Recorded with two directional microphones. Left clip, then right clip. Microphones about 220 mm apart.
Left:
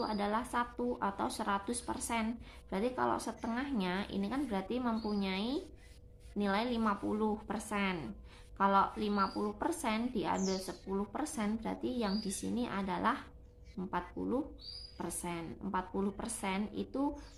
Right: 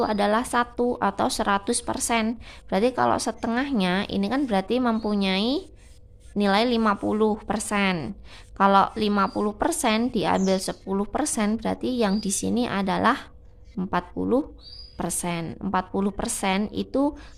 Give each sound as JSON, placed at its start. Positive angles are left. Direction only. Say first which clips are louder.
{"t": 0.0, "sound": "a woman's voice", "louder": "right 13 dB", "side_deg": -50}